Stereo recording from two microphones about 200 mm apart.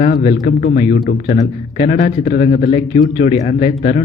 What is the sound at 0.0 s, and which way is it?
A man's voice, 45° left (ahead or behind).